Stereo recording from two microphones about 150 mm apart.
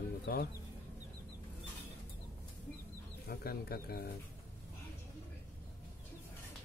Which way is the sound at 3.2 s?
90° left.